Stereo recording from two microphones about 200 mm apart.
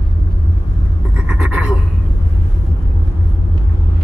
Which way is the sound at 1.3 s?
5° right (ahead or behind).